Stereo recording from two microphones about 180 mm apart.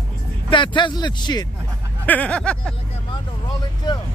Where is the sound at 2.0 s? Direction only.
10° left (ahead or behind).